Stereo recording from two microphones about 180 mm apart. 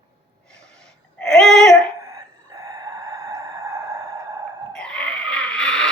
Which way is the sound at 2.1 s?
20° right (ahead or behind).